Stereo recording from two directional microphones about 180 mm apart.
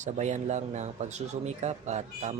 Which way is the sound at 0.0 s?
40° right (ahead or behind).